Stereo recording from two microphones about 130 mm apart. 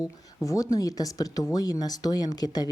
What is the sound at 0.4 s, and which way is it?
A woman's voice, 25° left (ahead or behind).